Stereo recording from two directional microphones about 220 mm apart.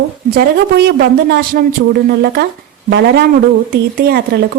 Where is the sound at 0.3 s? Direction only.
45° right (ahead or behind).